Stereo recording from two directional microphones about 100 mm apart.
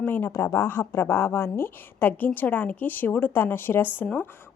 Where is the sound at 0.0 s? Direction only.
20° left (ahead or behind).